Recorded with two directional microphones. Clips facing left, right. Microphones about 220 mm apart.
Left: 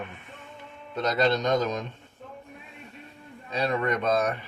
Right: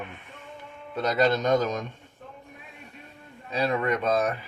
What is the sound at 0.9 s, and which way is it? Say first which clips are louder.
Speech: right 1 dB; 5° right (ahead or behind).